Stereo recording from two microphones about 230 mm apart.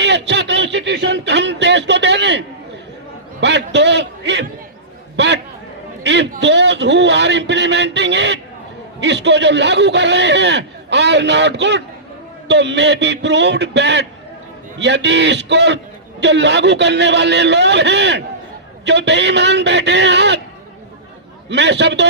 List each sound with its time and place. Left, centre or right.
0.0 s a sound: right
3.4 s a man's voice: right
5.1 s chatter: right
6.0 s a sound: right
6.3 s a man's voice: right
21.5 s a man's voice: right